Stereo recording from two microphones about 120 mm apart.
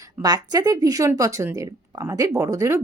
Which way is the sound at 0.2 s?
30° right (ahead or behind).